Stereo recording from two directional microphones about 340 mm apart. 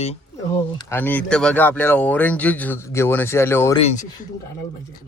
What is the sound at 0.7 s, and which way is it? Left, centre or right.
Speech, centre.